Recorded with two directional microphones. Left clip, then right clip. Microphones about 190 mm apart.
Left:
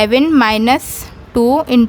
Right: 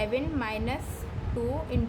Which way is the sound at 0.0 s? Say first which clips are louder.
Left 19 dB; 65° left (ahead or behind).